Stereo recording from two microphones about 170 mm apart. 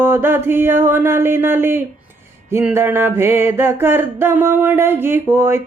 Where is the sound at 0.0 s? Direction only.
10° right (ahead or behind).